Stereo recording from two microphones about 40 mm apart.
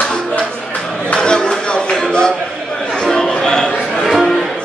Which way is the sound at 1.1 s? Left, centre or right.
Left.